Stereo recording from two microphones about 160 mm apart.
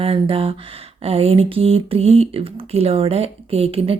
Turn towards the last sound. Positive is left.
turn(degrees=-35)  # may be behind; listen again after turning